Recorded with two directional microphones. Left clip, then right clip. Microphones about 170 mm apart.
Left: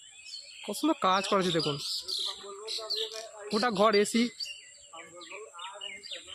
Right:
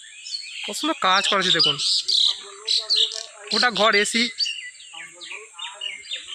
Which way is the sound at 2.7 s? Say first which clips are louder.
Right 15 dB; 65° left (ahead or behind).